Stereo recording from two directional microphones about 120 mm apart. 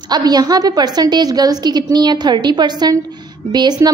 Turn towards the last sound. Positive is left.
turn(degrees=-35)  # may be behind; listen again after turning